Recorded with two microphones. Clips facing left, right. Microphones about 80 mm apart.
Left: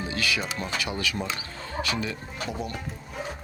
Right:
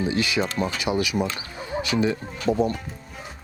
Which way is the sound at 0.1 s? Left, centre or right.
Right.